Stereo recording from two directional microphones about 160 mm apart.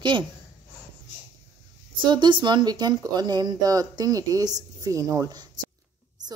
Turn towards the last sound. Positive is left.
turn(degrees=-20)  # may be behind; listen again after turning